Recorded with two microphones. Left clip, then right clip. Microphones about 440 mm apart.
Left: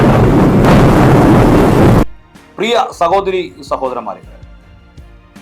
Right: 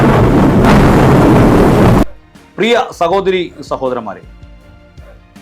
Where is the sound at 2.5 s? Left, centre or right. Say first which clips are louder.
Right 1 dB; right.